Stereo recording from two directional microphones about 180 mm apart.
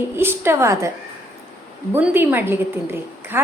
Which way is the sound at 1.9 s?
10° right (ahead or behind).